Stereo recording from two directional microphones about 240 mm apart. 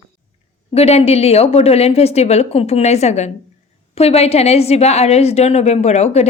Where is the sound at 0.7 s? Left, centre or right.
Left.